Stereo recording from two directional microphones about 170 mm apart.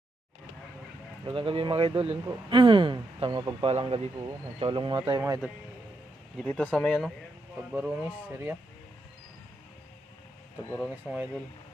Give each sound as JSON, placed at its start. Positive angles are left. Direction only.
{"t": 1.2, "sound": "a man's voice", "side_deg": -30}
{"t": 4.9, "sound": "a man's voice", "side_deg": -20}
{"t": 6.3, "sound": "speech", "side_deg": 5}
{"t": 7.7, "sound": "speech", "side_deg": -5}
{"t": 10.8, "sound": "speech", "side_deg": -5}